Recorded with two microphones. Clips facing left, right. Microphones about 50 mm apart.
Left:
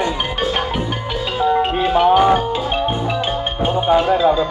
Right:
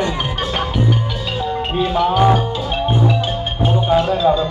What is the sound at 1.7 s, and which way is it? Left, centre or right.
Music, left.